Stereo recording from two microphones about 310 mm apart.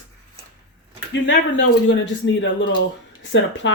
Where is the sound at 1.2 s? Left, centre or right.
Left.